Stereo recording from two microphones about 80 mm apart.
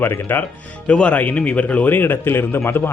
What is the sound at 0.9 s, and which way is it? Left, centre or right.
Speech, centre.